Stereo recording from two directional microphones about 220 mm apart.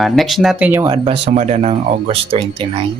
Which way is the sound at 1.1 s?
30° right (ahead or behind).